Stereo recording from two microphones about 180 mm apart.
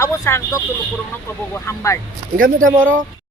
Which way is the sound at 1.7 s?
15° left (ahead or behind).